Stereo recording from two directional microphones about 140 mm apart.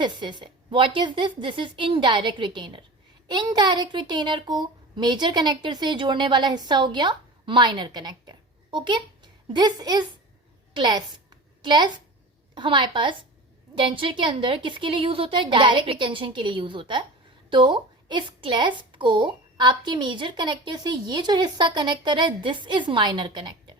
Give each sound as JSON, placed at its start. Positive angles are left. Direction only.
{"t": 0.0, "sound": "a woman's voice", "side_deg": -35}